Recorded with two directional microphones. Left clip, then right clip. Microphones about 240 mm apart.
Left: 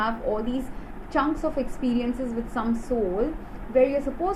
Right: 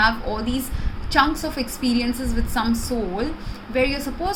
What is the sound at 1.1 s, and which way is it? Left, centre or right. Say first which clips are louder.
A woman's voice: right 5 dB; right.